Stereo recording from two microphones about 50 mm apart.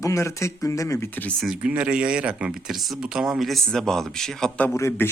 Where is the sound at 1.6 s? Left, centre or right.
Right.